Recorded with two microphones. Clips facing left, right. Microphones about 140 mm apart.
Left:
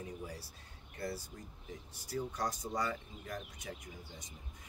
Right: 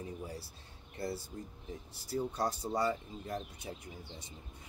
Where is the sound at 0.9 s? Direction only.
25° right (ahead or behind).